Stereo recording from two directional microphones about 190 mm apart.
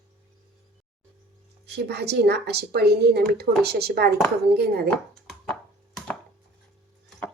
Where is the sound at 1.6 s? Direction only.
60° right (ahead or behind).